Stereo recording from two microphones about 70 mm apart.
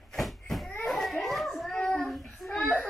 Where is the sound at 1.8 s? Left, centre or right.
Centre.